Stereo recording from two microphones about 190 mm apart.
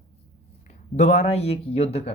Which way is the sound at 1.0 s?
35° left (ahead or behind).